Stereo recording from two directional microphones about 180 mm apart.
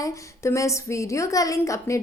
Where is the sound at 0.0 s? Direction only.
15° left (ahead or behind).